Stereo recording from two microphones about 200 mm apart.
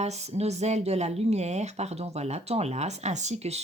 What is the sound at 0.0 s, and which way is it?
Speech, 35° right (ahead or behind).